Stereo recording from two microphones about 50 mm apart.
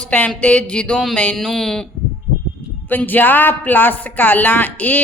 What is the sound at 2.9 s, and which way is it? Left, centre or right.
A woman's voice, left.